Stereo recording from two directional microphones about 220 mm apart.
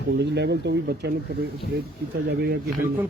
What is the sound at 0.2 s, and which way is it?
Speech, 50° right (ahead or behind).